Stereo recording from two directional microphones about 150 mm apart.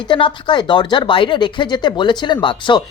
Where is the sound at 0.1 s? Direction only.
30° left (ahead or behind).